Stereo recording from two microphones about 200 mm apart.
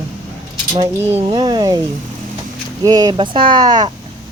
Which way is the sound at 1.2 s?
20° right (ahead or behind).